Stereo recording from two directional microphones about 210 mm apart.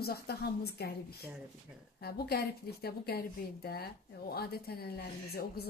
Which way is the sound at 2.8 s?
50° left (ahead or behind).